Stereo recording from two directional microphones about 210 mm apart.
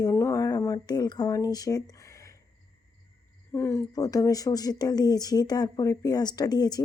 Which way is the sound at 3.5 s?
10° left (ahead or behind).